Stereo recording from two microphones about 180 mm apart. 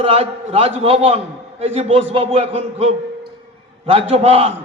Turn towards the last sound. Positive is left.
turn(degrees=-35)  # may be behind; listen again after turning